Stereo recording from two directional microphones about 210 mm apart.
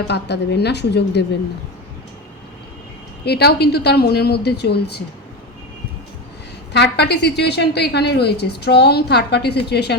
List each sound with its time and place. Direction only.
0.1 s a woman's voice: 55° left (ahead or behind)
3.2 s a woman's voice: 50° left (ahead or behind)
6.7 s a woman's voice: 55° left (ahead or behind)